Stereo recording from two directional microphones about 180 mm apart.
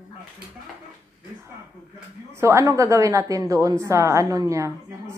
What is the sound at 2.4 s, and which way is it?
A woman's voice, 15° right (ahead or behind).